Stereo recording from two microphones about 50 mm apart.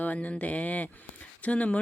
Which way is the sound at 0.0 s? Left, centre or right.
Left.